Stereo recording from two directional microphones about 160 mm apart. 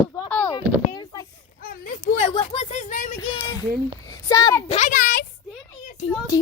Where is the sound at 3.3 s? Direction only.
25° left (ahead or behind).